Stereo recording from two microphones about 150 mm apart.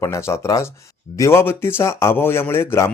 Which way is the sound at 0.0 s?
20° left (ahead or behind).